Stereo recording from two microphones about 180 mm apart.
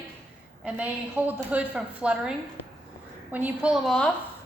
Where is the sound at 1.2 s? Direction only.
10° right (ahead or behind).